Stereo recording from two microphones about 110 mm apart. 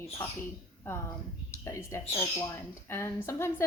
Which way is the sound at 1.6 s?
25° left (ahead or behind).